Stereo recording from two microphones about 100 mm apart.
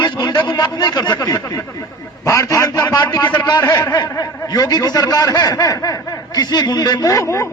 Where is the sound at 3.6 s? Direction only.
35° left (ahead or behind).